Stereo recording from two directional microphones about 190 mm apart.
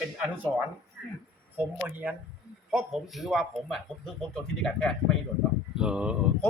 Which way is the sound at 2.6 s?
Centre (ahead or behind).